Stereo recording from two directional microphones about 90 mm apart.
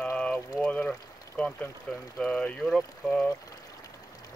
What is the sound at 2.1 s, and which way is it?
Speech, 10° left (ahead or behind).